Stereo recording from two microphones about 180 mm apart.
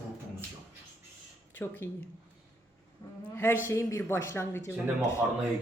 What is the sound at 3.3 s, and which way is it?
A woman's voice, 10° left (ahead or behind).